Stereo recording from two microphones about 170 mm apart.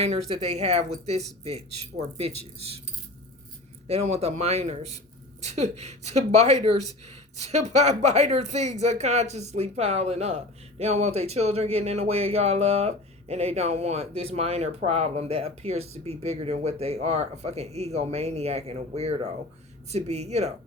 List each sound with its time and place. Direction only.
0.0 s speech: 35° right (ahead or behind)
3.8 s speech: 40° right (ahead or behind)